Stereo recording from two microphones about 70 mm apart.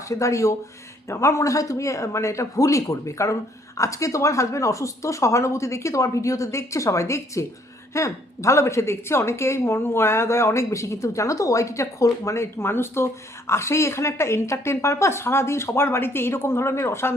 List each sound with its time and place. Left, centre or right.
0.1 s a woman's voice: left